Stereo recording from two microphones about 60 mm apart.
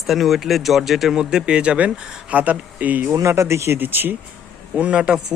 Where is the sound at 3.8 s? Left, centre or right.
Right.